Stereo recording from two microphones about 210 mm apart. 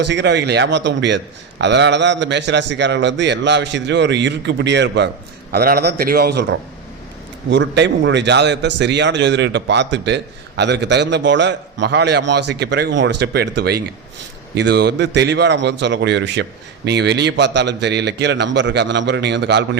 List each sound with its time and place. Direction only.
0.0 s a man's voice: 55° right (ahead or behind)
7.5 s a man's voice: 55° right (ahead or behind)